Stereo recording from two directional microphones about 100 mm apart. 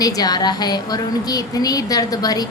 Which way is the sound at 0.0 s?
40° left (ahead or behind).